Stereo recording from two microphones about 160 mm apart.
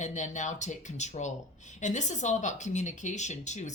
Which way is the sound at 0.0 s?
50° left (ahead or behind).